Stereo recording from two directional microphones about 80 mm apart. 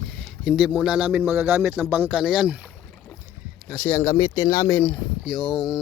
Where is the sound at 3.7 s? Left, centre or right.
Centre.